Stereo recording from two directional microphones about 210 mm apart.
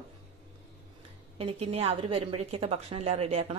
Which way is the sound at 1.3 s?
30° right (ahead or behind).